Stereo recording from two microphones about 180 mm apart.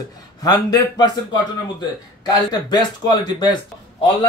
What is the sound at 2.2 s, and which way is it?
A man's voice, 20° left (ahead or behind).